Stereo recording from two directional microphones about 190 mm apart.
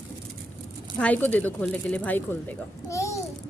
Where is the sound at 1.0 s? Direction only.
10° left (ahead or behind).